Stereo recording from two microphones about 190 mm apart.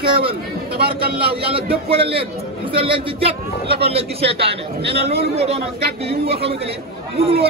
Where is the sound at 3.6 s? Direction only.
55° right (ahead or behind).